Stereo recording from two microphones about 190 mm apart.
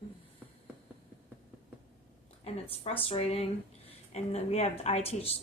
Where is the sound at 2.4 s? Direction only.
30° left (ahead or behind).